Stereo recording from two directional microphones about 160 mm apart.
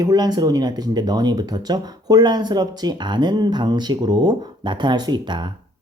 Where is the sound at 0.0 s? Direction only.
25° right (ahead or behind).